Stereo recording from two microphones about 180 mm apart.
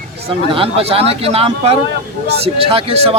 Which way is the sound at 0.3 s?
30° right (ahead or behind).